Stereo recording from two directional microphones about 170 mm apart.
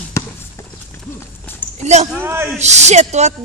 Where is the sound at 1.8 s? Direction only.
40° right (ahead or behind).